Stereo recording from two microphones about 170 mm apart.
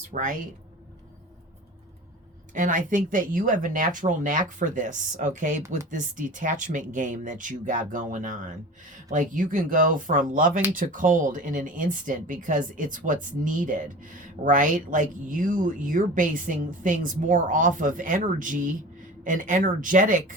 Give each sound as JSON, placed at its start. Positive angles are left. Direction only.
{"t": 0.1, "sound": "speech", "side_deg": -50}
{"t": 2.5, "sound": "speech", "side_deg": -50}